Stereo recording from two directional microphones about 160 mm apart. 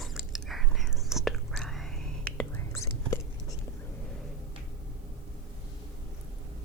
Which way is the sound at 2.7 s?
20° left (ahead or behind).